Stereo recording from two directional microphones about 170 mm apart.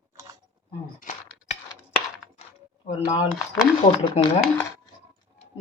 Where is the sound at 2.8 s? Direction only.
50° left (ahead or behind).